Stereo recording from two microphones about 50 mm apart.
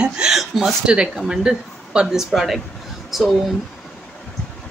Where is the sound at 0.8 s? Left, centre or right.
Right; by 3.3 s centre.